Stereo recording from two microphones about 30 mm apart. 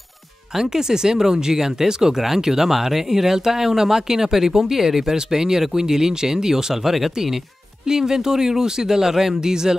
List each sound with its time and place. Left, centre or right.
0.6 s speech: right
7.8 s speech: right